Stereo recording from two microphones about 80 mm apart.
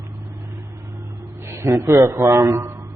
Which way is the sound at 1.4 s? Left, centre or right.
Right.